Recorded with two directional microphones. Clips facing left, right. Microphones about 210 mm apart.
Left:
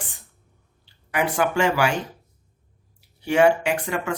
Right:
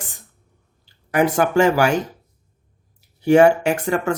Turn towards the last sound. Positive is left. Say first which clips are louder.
# right 5 dB
turn(degrees=-45)  # may be behind; listen again after turning